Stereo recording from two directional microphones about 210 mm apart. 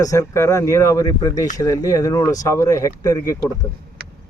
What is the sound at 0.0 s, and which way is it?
Speech, 15° left (ahead or behind).